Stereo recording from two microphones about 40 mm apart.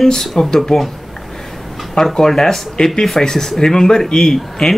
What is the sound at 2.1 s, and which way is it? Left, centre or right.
Speech, centre.